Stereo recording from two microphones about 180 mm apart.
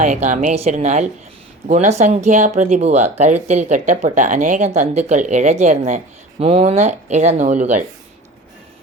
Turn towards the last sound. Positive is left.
turn(degrees=-45)  # may be behind; listen again after turning